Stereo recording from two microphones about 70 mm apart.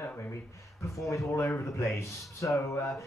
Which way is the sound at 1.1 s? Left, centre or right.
Left.